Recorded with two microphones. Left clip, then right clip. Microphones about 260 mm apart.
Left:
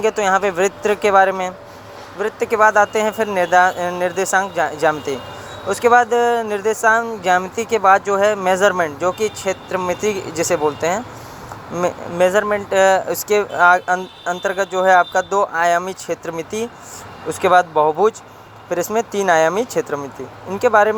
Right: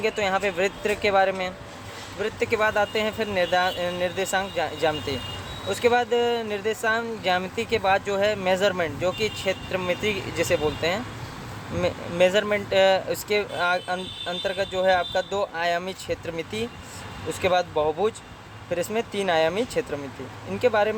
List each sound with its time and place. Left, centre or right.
0.2 s speech: centre